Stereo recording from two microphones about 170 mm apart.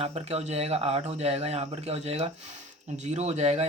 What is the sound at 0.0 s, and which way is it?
Speech, 40° right (ahead or behind).